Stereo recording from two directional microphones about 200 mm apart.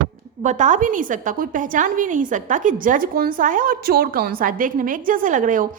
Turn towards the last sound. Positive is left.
turn(degrees=-40)  # may be behind; listen again after turning